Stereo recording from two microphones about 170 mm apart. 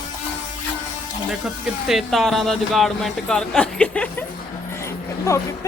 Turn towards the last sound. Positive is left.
turn(degrees=20)  # may be behind; listen again after turning